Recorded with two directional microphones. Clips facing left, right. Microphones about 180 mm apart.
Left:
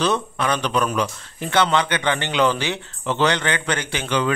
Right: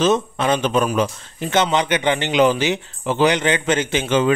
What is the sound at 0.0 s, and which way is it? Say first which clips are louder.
Speech: right 4 dB; 20° right (ahead or behind).